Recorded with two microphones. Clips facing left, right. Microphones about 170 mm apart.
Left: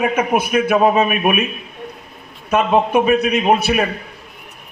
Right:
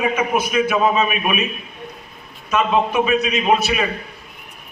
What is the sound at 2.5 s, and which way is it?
A man's voice, 55° left (ahead or behind).